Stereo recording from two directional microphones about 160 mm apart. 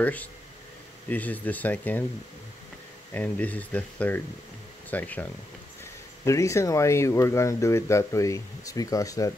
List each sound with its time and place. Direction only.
0.0 s speech: 10° left (ahead or behind)
3.1 s speech: 10° left (ahead or behind)
6.2 s speech: 20° left (ahead or behind)